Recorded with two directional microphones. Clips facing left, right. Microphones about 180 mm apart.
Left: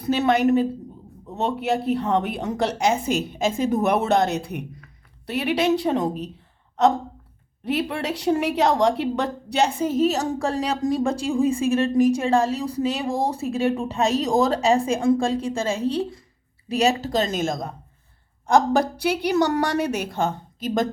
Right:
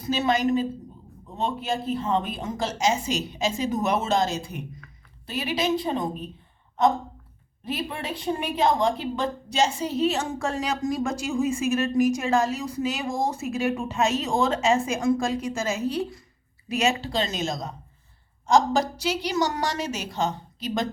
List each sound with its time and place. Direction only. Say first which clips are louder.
0.0 s a woman's voice: left 4 dB; 60° left (ahead or behind)